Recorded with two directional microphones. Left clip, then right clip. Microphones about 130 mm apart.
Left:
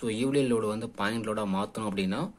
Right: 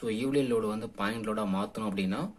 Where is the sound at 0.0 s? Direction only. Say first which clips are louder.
Left 2 dB; 30° left (ahead or behind).